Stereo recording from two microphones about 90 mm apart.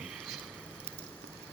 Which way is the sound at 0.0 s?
5° right (ahead or behind).